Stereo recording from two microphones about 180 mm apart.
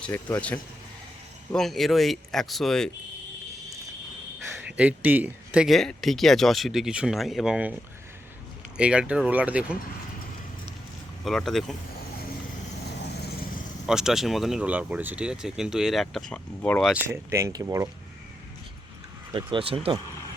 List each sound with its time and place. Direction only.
0.0 s speech: 10° left (ahead or behind)
4.4 s speech: 10° right (ahead or behind)
8.8 s speech: 5° right (ahead or behind)
11.2 s speech: centre (ahead or behind)
13.8 s speech: 5° right (ahead or behind)
17.1 s speech: 15° right (ahead or behind)
19.3 s speech: 25° right (ahead or behind)